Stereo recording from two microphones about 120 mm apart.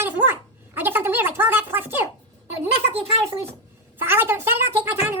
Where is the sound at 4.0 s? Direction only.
20° right (ahead or behind).